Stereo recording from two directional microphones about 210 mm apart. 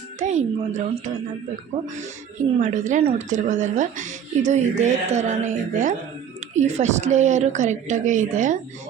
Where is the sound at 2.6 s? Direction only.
35° right (ahead or behind).